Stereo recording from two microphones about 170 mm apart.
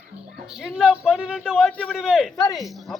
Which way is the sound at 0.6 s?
5° right (ahead or behind).